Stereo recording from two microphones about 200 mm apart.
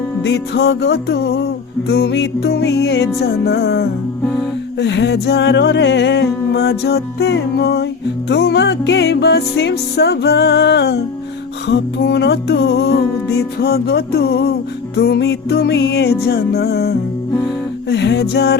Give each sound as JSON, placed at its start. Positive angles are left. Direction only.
{"t": 0.2, "sound": "music", "side_deg": 60}